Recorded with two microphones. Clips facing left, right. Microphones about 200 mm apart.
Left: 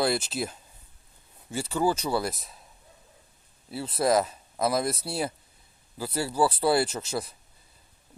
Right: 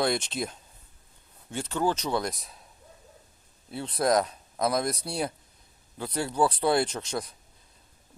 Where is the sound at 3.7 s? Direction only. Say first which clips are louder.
Left 1 dB; 5° left (ahead or behind).